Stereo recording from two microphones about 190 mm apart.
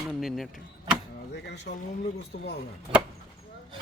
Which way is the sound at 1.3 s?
65° left (ahead or behind).